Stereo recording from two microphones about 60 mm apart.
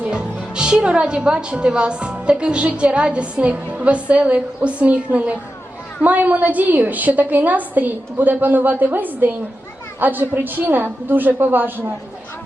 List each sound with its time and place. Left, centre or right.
0.0 s a woman's voice: centre; by 11.7 s right